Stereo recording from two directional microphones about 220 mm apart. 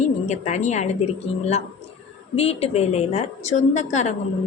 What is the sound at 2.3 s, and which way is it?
A woman's voice, 25° left (ahead or behind).